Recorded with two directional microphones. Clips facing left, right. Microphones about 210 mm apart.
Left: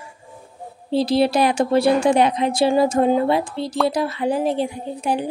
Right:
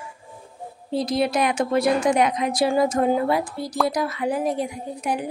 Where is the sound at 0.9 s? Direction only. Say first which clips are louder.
Left 5 dB; 30° left (ahead or behind).